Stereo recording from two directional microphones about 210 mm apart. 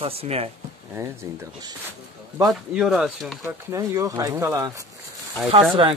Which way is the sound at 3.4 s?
15° right (ahead or behind).